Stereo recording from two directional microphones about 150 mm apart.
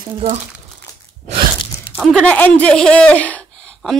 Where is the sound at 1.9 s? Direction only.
5° left (ahead or behind).